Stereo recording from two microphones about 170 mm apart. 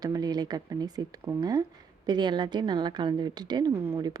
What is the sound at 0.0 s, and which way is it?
A woman's voice, 25° right (ahead or behind).